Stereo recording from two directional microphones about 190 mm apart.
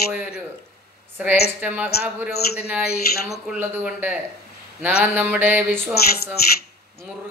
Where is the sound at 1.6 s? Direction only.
10° right (ahead or behind).